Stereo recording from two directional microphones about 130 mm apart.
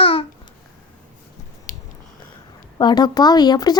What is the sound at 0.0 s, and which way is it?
Babbling, 45° left (ahead or behind).